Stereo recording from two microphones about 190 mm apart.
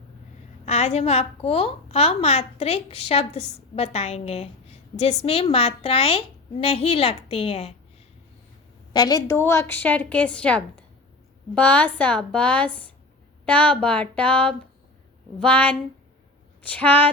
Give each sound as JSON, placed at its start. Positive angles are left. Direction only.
{"t": 0.6, "sound": "a woman's voice", "side_deg": 35}
{"t": 8.9, "sound": "a woman's voice", "side_deg": 20}